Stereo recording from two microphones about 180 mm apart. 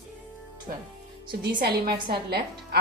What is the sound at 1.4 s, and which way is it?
A woman's voice, 60° right (ahead or behind).